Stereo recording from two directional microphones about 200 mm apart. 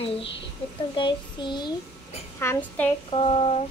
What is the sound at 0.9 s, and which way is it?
A child's voice, 25° left (ahead or behind).